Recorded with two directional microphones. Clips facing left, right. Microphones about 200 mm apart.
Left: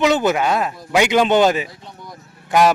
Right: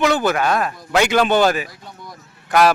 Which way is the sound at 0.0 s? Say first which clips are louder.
Left 1 dB; 20° left (ahead or behind).